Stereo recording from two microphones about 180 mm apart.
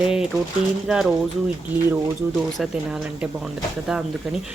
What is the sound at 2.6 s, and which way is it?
Speech, 5° right (ahead or behind).